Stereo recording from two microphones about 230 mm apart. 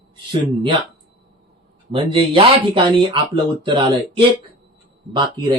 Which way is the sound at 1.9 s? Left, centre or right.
Right.